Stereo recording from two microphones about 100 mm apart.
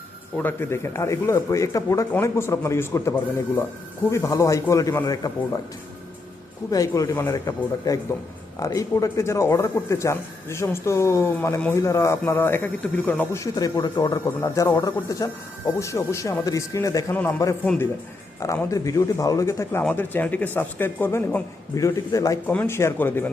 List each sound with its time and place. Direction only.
0.3 s speech: 20° left (ahead or behind); by 5.4 s 40° left (ahead or behind)
6.7 s speech: 35° left (ahead or behind); by 13.2 s 15° left (ahead or behind)
13.3 s speech: 35° left (ahead or behind)
14.4 s speech: 35° left (ahead or behind)
19.9 s speech: 20° left (ahead or behind)
21.8 s speech: 35° left (ahead or behind)
22.4 s speech: 20° left (ahead or behind)